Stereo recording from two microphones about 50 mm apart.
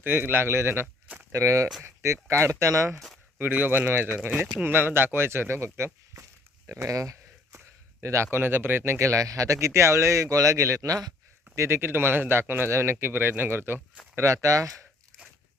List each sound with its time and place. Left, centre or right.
0.0 s a man's voice: right
1.3 s speech: right
1.8 s speech: right
3.3 s speech: right
6.7 s a sound: right
8.0 s a man's voice: right
8.3 s speech: right
11.8 s speech: right
14.4 s a man's voice: right